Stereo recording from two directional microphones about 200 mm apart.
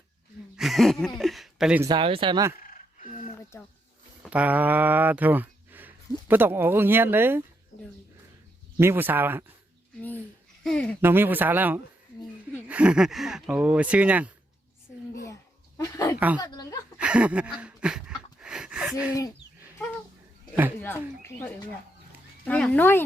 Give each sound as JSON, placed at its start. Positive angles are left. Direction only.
{"t": 0.5, "sound": "a sound", "side_deg": 0}
{"t": 1.2, "sound": "speech", "side_deg": 0}
{"t": 1.8, "sound": "speech", "side_deg": -25}
{"t": 2.6, "sound": "a sound", "side_deg": 40}
{"t": 4.2, "sound": "speech", "side_deg": -5}
{"t": 8.8, "sound": "speech", "side_deg": -10}
{"t": 10.6, "sound": "speech", "side_deg": 5}
{"t": 11.0, "sound": "speech", "side_deg": -10}
{"t": 15.8, "sound": "speech", "side_deg": 15}
{"t": 17.0, "sound": "a sound", "side_deg": -5}
{"t": 21.2, "sound": "speech", "side_deg": 10}